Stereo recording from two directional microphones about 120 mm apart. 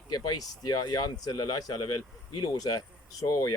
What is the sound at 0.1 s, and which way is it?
Speech, 35° left (ahead or behind).